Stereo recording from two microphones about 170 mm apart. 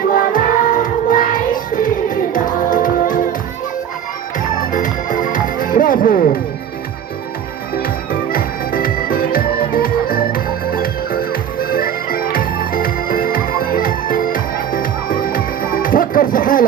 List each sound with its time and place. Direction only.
0.1 s music: 55° left (ahead or behind)
4.7 s music: 50° left (ahead or behind)
7.8 s music: 60° left (ahead or behind)